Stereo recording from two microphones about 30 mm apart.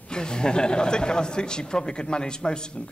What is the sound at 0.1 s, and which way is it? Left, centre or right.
Speech, left.